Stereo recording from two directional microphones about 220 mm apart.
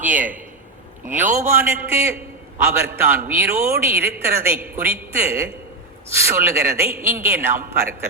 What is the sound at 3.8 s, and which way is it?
Speech, 45° right (ahead or behind).